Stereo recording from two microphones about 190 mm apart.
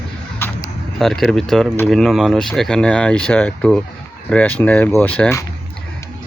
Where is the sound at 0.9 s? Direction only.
Centre (ahead or behind).